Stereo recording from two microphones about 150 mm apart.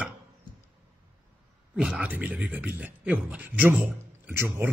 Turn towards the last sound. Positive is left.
turn(degrees=-15)  # may be behind; listen again after turning